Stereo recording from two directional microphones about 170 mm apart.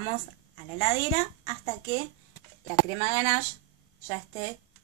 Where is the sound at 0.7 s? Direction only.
35° left (ahead or behind).